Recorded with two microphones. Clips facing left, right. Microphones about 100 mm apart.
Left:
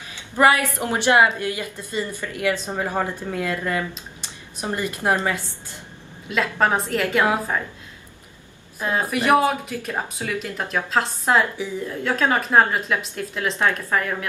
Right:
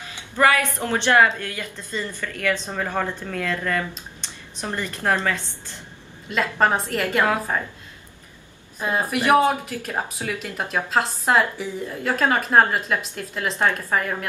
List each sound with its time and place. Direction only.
0.4 s a woman's voice: 20° left (ahead or behind)
6.2 s speech: centre (ahead or behind)
8.8 s speech: centre (ahead or behind)